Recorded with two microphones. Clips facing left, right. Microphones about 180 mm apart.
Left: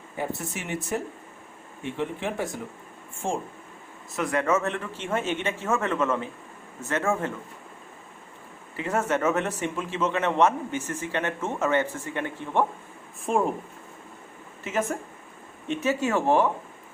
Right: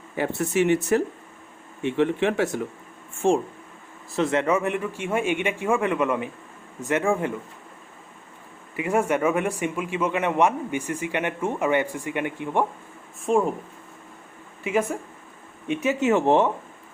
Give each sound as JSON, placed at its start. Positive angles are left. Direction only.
{"t": 0.2, "sound": "speech", "side_deg": -70}
{"t": 4.1, "sound": "a man's voice", "side_deg": -25}
{"t": 8.7, "sound": "a man's voice", "side_deg": -10}
{"t": 13.3, "sound": "speech", "side_deg": 0}
{"t": 14.6, "sound": "speech", "side_deg": -15}